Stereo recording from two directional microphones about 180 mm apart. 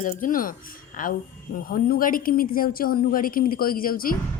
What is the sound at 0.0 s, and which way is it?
Speech, 50° left (ahead or behind).